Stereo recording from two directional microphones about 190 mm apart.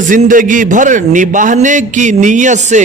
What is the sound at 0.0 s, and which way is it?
A man's voice, 40° right (ahead or behind).